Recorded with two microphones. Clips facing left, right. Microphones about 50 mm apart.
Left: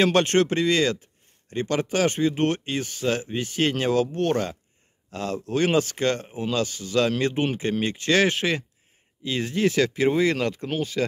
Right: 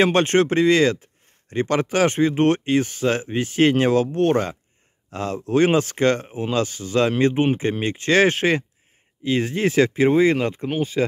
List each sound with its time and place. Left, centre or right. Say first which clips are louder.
0.0 s speech: right 2 dB; right